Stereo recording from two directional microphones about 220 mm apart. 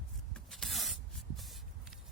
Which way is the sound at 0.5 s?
Centre (ahead or behind).